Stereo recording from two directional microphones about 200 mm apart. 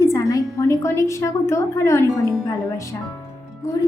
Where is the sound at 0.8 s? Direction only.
15° left (ahead or behind).